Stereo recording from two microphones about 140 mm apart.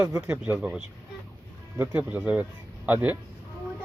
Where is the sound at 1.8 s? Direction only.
10° right (ahead or behind).